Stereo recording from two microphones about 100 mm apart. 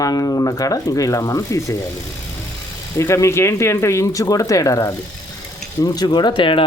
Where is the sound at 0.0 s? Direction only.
35° left (ahead or behind).